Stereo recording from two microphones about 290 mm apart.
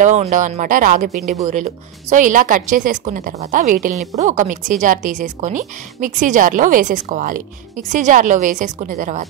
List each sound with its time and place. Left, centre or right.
0.0 s speech: right